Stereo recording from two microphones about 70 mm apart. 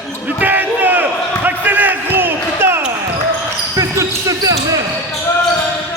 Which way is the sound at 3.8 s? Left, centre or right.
Right.